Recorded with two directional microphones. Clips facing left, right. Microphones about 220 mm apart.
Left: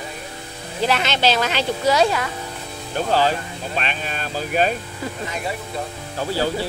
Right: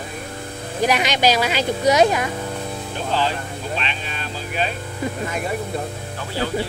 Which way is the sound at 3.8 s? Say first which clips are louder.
Left 2 dB; 50° left (ahead or behind).